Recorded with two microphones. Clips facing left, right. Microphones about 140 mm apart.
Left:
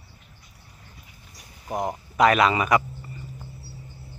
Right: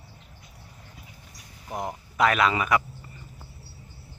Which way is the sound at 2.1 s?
5° left (ahead or behind).